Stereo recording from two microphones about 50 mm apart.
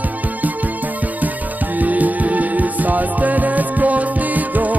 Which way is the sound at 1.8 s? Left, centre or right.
Right.